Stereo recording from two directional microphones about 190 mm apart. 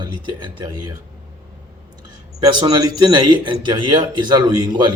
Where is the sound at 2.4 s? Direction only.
20° right (ahead or behind).